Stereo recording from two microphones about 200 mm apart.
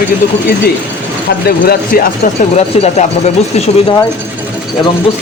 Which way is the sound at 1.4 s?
50° left (ahead or behind).